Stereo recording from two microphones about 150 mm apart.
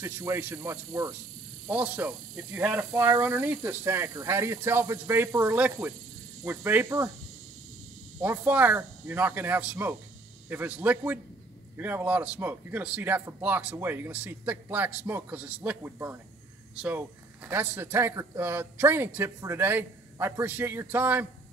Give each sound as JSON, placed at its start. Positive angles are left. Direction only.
{"t": 0.0, "sound": "speech", "side_deg": -15}
{"t": 8.2, "sound": "speech", "side_deg": -10}